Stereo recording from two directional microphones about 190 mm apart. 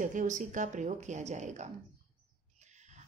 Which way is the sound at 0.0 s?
40° right (ahead or behind).